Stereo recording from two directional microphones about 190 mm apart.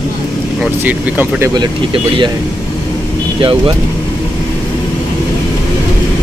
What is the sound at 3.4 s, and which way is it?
Speech, 25° right (ahead or behind).